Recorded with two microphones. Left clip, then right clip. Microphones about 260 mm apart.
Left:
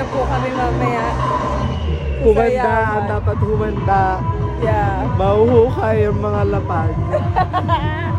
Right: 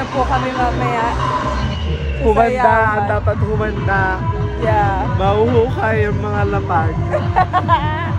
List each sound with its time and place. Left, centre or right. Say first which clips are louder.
2.2 s speech: right 1 dB; centre
5.2 s speech: left 2 dB; centre
7.3 s speech: right 5 dB; centre